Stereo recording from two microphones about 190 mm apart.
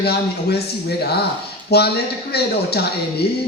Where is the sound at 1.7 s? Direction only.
55° left (ahead or behind).